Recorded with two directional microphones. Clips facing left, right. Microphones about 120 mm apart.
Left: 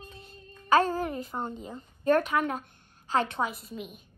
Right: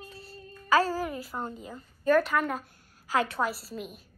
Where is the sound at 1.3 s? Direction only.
15° left (ahead or behind).